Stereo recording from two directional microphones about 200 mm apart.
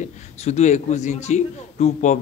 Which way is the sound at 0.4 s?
35° left (ahead or behind).